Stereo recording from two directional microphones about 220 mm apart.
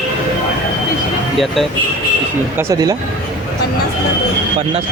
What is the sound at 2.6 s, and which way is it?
Speech, 15° right (ahead or behind).